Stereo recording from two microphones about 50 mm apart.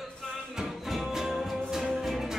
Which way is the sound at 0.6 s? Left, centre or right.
Centre.